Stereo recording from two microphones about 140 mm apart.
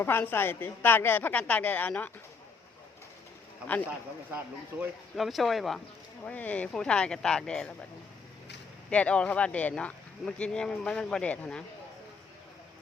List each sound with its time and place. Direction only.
0.0 s speech: 15° left (ahead or behind)
4.7 s speech: 15° right (ahead or behind)
5.1 s speech: centre (ahead or behind)
8.9 s speech: 10° left (ahead or behind)